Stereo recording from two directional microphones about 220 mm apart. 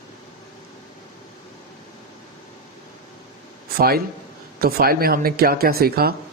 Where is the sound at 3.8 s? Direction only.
45° right (ahead or behind).